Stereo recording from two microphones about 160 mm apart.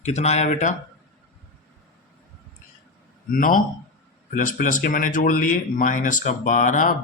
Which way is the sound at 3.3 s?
60° left (ahead or behind).